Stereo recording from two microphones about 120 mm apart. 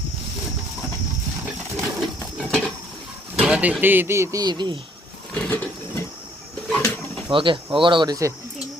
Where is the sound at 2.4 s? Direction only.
5° left (ahead or behind).